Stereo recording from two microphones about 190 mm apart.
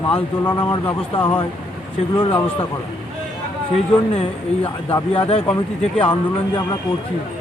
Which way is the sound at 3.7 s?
30° left (ahead or behind).